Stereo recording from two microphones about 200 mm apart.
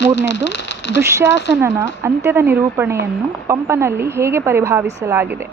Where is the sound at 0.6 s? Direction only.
65° left (ahead or behind).